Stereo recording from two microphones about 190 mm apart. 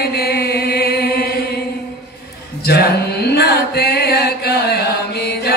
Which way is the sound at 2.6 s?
55° left (ahead or behind).